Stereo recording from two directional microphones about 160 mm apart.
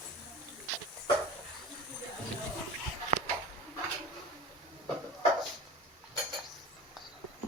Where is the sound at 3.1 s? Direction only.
55° right (ahead or behind).